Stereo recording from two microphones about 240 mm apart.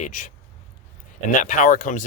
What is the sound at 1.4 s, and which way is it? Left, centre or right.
Speech, left.